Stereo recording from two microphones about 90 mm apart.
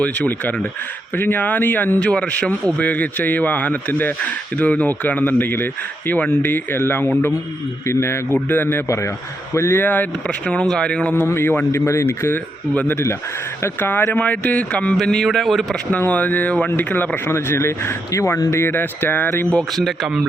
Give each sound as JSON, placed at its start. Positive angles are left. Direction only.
{"t": 0.0, "sound": "speech", "side_deg": 15}
{"t": 10.2, "sound": "speech", "side_deg": 10}
{"t": 11.1, "sound": "speech", "side_deg": 25}
{"t": 15.9, "sound": "speech", "side_deg": 15}
{"t": 19.5, "sound": "speech", "side_deg": 5}